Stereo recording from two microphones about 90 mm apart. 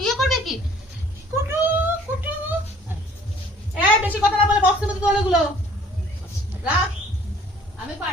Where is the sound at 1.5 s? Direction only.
20° right (ahead or behind).